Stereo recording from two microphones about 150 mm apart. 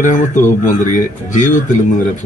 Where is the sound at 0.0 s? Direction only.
55° left (ahead or behind).